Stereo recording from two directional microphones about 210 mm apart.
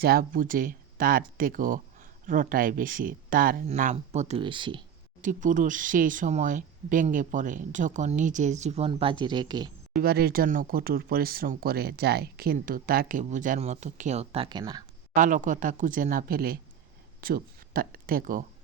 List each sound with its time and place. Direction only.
0.0 s speech: 45° right (ahead or behind); by 4.8 s 25° right (ahead or behind)
5.2 s speech: 40° right (ahead or behind); by 9.7 s 20° right (ahead or behind)
10.0 s speech: 45° right (ahead or behind); by 14.8 s 20° right (ahead or behind)
15.1 s speech: 35° right (ahead or behind)